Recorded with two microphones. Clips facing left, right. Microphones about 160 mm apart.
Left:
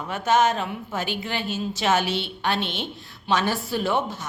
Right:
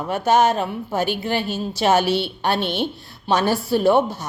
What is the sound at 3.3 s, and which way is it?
Speech, 35° right (ahead or behind).